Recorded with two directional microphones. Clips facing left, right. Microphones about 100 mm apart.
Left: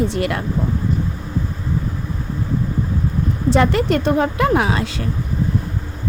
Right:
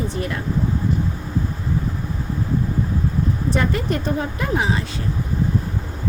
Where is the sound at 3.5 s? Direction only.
90° left.